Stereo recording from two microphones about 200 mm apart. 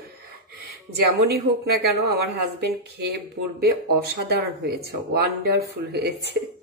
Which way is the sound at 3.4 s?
65° right (ahead or behind).